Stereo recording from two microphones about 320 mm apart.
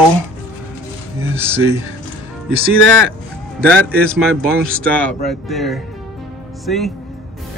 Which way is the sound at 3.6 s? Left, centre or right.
Centre.